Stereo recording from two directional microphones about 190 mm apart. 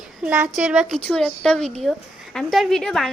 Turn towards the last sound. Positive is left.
turn(degrees=0)  # may be behind; listen again after turning